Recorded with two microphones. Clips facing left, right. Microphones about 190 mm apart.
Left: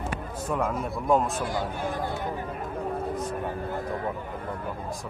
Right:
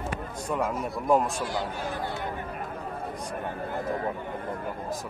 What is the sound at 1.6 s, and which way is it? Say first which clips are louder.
Speech: left 2 dB; 55° left (ahead or behind).